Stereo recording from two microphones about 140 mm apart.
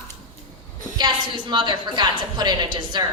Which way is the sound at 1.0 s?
35° right (ahead or behind).